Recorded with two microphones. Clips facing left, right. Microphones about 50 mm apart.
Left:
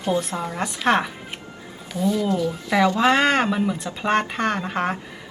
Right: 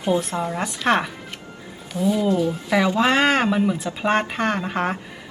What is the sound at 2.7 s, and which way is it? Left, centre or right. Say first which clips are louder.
Speech: left 2 dB; centre.